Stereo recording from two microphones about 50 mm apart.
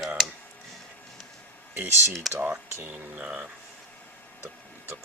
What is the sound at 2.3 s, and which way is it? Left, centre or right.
Rub, centre.